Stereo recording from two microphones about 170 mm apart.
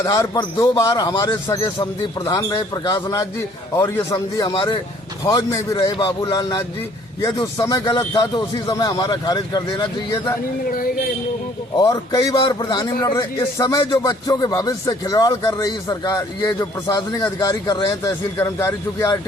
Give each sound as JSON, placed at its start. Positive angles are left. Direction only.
{"t": 0.0, "sound": "speech", "side_deg": 20}
{"t": 10.7, "sound": "speech", "side_deg": 55}
{"t": 11.8, "sound": "speech", "side_deg": 20}